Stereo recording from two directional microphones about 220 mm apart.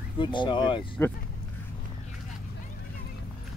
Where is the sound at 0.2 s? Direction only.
20° left (ahead or behind).